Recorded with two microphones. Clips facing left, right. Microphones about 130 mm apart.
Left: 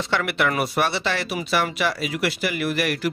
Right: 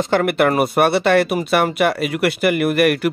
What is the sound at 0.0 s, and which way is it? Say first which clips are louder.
Speech: right 7 dB; 45° right (ahead or behind).